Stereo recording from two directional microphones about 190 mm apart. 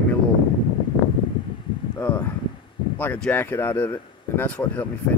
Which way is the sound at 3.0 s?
10° left (ahead or behind).